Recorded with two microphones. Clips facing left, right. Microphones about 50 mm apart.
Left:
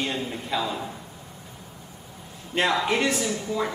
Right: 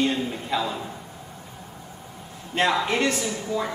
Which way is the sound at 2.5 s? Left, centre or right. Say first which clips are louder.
Right 1 dB; centre.